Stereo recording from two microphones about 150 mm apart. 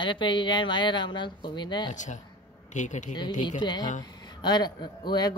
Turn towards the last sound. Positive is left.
turn(degrees=30)  # may be behind; listen again after turning